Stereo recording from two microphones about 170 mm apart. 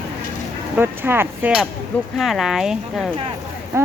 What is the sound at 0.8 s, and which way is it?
Speech, 10° right (ahead or behind).